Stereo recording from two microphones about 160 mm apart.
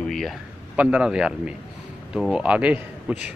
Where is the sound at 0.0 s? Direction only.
Centre (ahead or behind).